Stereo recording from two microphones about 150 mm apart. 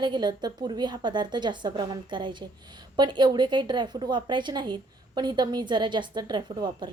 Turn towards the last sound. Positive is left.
turn(degrees=-30)  # may be behind; listen again after turning